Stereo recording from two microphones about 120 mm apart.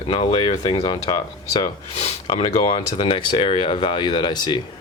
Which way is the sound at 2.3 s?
50° left (ahead or behind).